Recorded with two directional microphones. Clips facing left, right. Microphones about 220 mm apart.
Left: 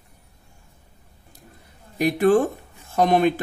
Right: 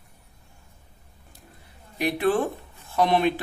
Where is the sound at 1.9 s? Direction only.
45° left (ahead or behind).